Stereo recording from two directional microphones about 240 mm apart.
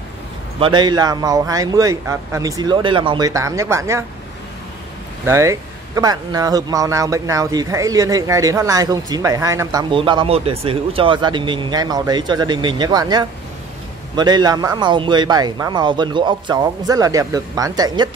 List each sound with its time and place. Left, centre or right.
0.6 s a man's voice: centre
5.2 s a man's voice: centre